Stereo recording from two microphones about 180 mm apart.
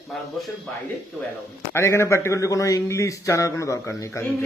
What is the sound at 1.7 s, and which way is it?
A man's voice, 15° left (ahead or behind).